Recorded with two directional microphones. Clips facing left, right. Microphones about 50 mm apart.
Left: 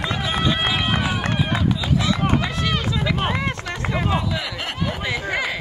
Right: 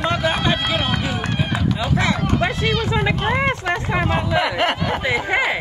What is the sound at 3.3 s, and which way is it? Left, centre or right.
Speech, right.